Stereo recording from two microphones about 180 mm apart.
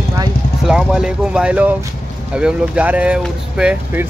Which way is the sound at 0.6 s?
5° right (ahead or behind).